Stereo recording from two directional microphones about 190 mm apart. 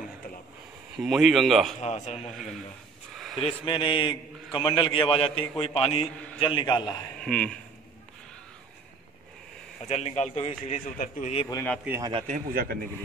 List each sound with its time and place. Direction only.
0.9 s speech: centre (ahead or behind)
1.8 s a man's voice: 35° left (ahead or behind)
2.1 s speech: centre (ahead or behind)
3.2 s a sound: centre (ahead or behind)
3.4 s a man's voice: 25° left (ahead or behind)
7.2 s speech: 5° left (ahead or behind)
9.8 s a man's voice: 35° left (ahead or behind)
11.8 s a man's voice: 10° right (ahead or behind)
12.3 s a man's voice: 50° right (ahead or behind)